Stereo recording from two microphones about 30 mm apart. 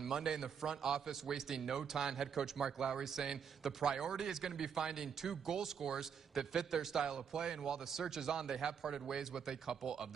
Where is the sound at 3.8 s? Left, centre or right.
Right.